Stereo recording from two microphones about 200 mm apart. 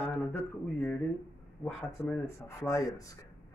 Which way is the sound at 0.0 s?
10° left (ahead or behind).